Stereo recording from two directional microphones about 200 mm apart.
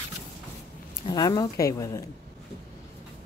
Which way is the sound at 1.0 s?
20° left (ahead or behind).